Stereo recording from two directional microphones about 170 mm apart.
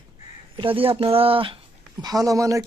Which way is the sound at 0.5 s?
30° right (ahead or behind).